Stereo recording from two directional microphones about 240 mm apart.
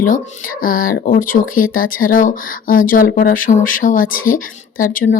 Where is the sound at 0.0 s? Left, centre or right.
Left.